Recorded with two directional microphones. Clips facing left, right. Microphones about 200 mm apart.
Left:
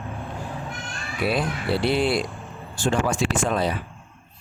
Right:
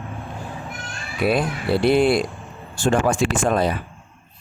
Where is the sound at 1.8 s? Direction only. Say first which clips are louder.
Right 6 dB; 50° right (ahead or behind).